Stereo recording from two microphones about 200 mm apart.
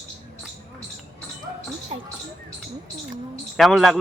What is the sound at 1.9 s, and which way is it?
Speech, 30° right (ahead or behind).